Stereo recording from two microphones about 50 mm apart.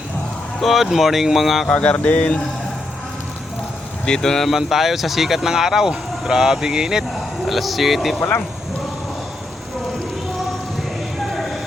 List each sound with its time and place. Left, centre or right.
0.6 s speech: centre
1.7 s a sound: left
4.0 s speech: centre
4.4 s speech: centre
7.4 s speech: centre
11.3 s vehicle: centre